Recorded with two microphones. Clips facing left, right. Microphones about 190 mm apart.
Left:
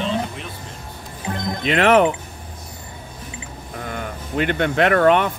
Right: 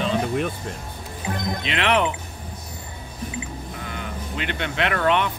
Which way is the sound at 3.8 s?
50° left (ahead or behind).